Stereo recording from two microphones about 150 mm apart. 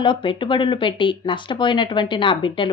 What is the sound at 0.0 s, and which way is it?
A woman's voice, 35° left (ahead or behind).